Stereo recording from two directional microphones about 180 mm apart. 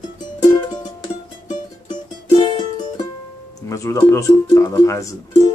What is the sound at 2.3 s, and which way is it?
Music, 25° left (ahead or behind).